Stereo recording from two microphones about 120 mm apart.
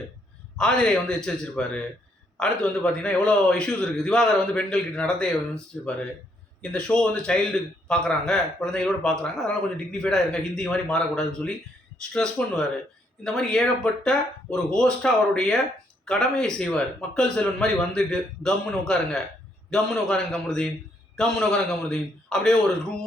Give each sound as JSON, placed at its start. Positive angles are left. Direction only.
{"t": 0.5, "sound": "a man's voice", "side_deg": 5}